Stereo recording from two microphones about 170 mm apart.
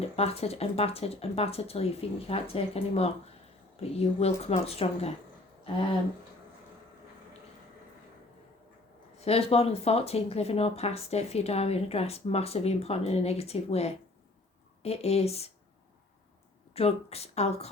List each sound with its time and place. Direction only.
0.0 s speech: 35° left (ahead or behind)
9.2 s speech: 35° left (ahead or behind)
16.7 s speech: 35° left (ahead or behind)